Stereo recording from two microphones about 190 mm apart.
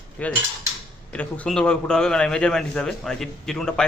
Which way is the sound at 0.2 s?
10° left (ahead or behind).